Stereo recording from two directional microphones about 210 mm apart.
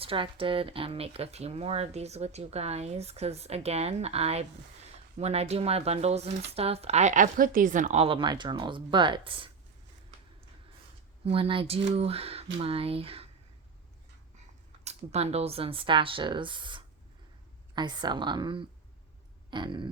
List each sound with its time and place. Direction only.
0.0 s speech: 25° right (ahead or behind)
11.3 s speech: 25° right (ahead or behind)
14.8 s speech: 30° right (ahead or behind)
19.5 s a sound: 20° right (ahead or behind)